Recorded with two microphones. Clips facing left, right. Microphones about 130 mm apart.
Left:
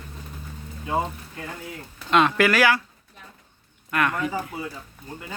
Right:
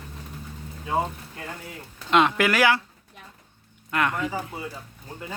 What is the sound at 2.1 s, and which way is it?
Speech, 20° right (ahead or behind).